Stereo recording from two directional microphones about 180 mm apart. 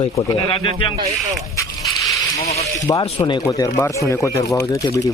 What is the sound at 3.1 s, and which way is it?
Speech, 30° left (ahead or behind).